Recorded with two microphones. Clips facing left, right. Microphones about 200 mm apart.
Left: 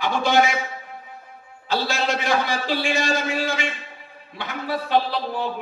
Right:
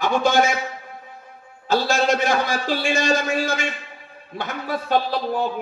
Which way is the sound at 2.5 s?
45° right (ahead or behind).